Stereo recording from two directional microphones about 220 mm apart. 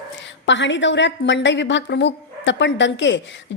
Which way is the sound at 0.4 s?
55° left (ahead or behind).